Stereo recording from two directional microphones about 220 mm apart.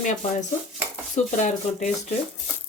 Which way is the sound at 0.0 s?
35° left (ahead or behind).